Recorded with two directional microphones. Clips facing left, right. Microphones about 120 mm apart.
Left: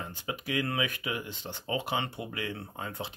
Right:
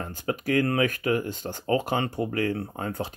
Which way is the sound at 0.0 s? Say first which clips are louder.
Right 8 dB; 45° right (ahead or behind).